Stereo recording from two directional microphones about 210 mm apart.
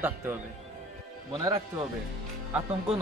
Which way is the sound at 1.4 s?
20° right (ahead or behind).